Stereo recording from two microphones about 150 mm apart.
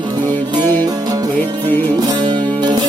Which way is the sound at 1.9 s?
30° right (ahead or behind).